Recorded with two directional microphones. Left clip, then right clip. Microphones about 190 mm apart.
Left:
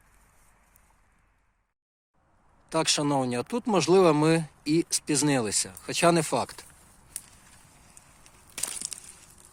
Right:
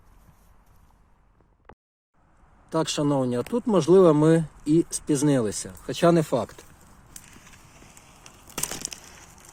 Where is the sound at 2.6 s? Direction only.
25° left (ahead or behind).